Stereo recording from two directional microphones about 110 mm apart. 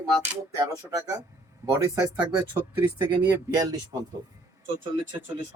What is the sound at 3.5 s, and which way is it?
Speech, 35° right (ahead or behind).